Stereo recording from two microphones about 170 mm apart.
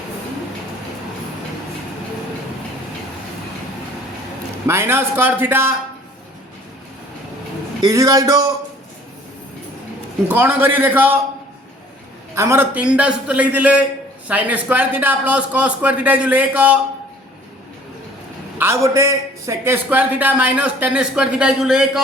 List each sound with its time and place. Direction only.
4.6 s a man's voice: 15° right (ahead or behind)
7.9 s speech: 20° right (ahead or behind)
10.2 s a man's voice: 10° right (ahead or behind)
12.3 s a man's voice: 15° right (ahead or behind)
18.6 s a man's voice: 15° right (ahead or behind)